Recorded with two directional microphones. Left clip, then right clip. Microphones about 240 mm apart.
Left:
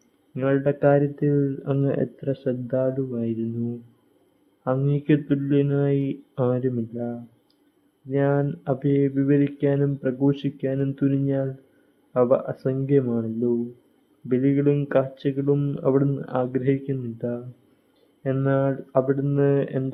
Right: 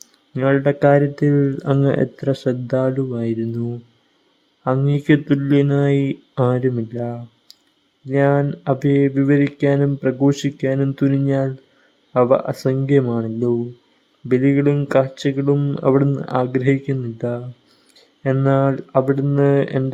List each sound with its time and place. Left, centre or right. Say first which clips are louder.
0.3 s speech: right 5 dB; right